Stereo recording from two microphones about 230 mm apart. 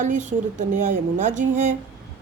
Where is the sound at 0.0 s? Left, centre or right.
Right.